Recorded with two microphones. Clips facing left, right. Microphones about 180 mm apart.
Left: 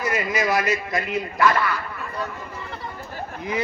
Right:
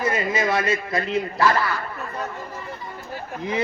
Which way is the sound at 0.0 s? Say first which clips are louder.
Right 1 dB; 25° right (ahead or behind).